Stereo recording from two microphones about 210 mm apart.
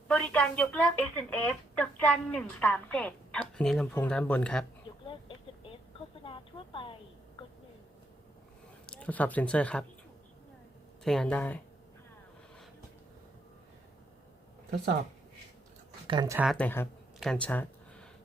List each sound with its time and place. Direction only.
0.1 s speech: 5° left (ahead or behind)
6.2 s speech: 25° left (ahead or behind)
8.9 s speech: 5° left (ahead or behind)
11.0 s speech: 5° left (ahead or behind)
16.0 s speech: 20° right (ahead or behind)
16.4 s speech: 5° left (ahead or behind)